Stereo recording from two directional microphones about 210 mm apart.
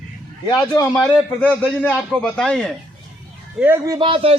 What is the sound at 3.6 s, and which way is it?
Speech, 10° right (ahead or behind).